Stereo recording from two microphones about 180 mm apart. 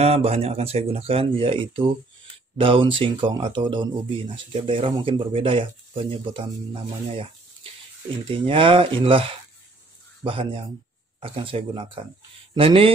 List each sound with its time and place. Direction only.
0.0 s speech: 35° right (ahead or behind)